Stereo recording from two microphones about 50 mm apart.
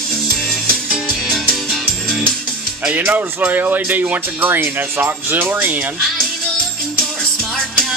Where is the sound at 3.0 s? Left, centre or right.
Right.